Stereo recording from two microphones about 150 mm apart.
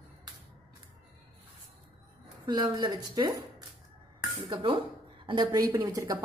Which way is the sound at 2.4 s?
30° right (ahead or behind).